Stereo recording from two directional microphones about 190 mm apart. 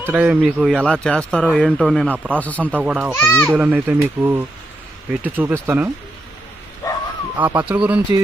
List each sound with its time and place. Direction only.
0.0 s speech: 10° right (ahead or behind)
2.1 s speech: 10° right (ahead or behind)
2.4 s speech: 10° left (ahead or behind)
2.7 s speech: 5° right (ahead or behind)
3.1 s speech: 15° left (ahead or behind)
3.5 s speech: 10° right (ahead or behind)
6.8 s bow-wow: 20° left (ahead or behind)
7.3 s speech: 10° right (ahead or behind)